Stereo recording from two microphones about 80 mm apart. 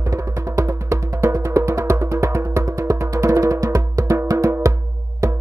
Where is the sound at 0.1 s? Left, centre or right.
Right.